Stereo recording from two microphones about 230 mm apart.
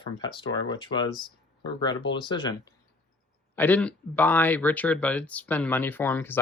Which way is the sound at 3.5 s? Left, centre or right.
Centre.